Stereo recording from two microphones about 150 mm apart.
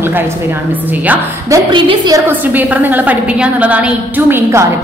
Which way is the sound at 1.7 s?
35° right (ahead or behind).